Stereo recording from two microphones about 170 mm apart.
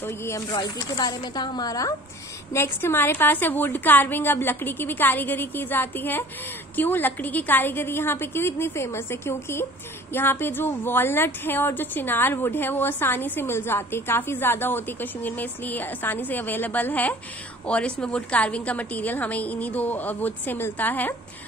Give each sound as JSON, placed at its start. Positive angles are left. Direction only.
{"t": 0.0, "sound": "a woman's voice", "side_deg": 15}